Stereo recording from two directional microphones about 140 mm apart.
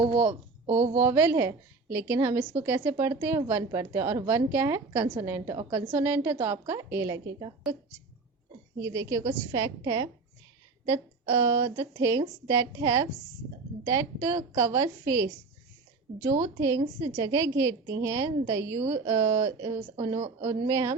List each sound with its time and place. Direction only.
0.9 s a woman's voice: 15° right (ahead or behind); by 7.8 s 30° right (ahead or behind)
8.8 s a woman's voice: 25° right (ahead or behind)
16.4 s a woman's voice: 20° right (ahead or behind)